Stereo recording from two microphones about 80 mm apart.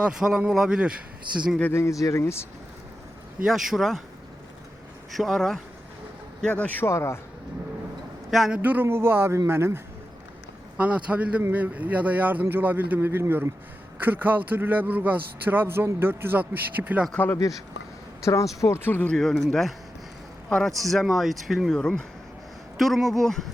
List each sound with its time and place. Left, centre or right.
0.0 s speech: centre
1.7 s speech: left
3.4 s speech: centre
5.1 s speech: centre
6.4 s a man's voice: centre
6.8 s speech: left
8.3 s speech: centre
8.5 s a man's voice: right
10.8 s a man's voice: centre
18.2 s speech: left
19.1 s speech: centre
21.8 s a man's voice: centre